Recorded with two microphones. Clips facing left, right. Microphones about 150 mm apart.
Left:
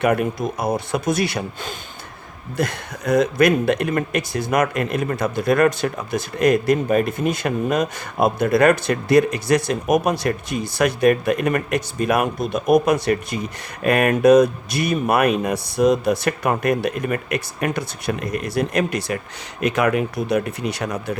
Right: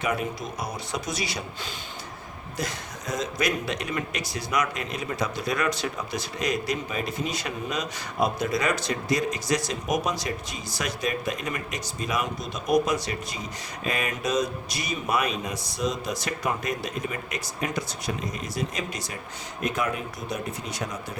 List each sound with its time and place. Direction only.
0.0 s speech: 55° left (ahead or behind)